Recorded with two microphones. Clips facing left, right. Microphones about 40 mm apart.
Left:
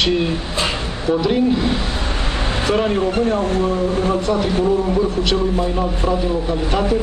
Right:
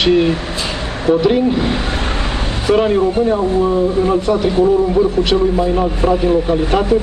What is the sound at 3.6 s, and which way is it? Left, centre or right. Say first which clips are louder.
Speech: right 4 dB; right.